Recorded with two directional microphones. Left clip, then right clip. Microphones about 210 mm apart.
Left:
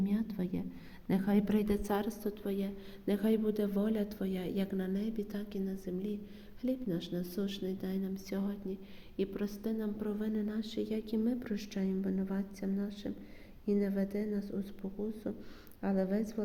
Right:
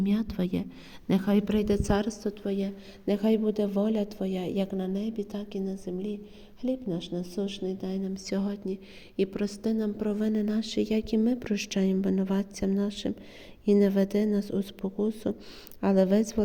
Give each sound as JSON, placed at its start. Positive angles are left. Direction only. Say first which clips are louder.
{"t": 0.0, "sound": "a woman's voice", "louder": "right 7 dB", "side_deg": -35}